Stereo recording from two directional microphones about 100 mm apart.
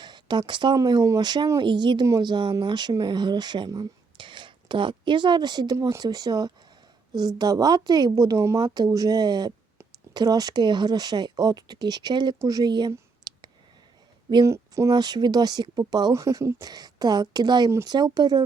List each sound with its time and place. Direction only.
0.0 s a sound: 50° right (ahead or behind)
0.8 s speech: 40° right (ahead or behind)
5.7 s speech: 30° right (ahead or behind)
6.0 s a woman's voice: 40° right (ahead or behind)
8.6 s a woman's voice: 45° right (ahead or behind)
13.3 s clicking: 45° right (ahead or behind)
14.4 s a sound: 30° right (ahead or behind)
14.9 s speech: 45° right (ahead or behind)
16.1 s a woman's voice: 30° right (ahead or behind)